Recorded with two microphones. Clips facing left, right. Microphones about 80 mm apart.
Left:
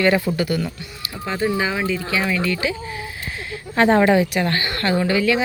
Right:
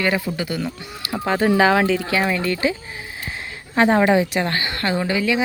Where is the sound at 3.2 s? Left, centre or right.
Right.